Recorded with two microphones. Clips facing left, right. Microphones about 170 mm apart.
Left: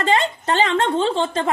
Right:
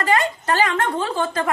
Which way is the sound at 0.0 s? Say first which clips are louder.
Left 1 dB; 25° left (ahead or behind).